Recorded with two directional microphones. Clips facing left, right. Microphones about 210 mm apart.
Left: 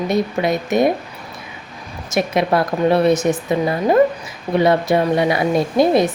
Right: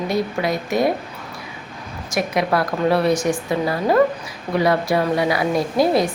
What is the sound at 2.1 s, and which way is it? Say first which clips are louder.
A woman's voice: left 3 dB; 25° left (ahead or behind).